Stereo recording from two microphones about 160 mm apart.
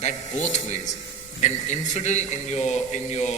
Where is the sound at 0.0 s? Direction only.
45° left (ahead or behind).